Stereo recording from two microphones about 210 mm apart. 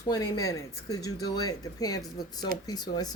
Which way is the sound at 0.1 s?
15° left (ahead or behind).